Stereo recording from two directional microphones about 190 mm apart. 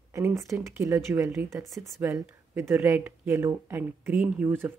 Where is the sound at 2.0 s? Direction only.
15° right (ahead or behind).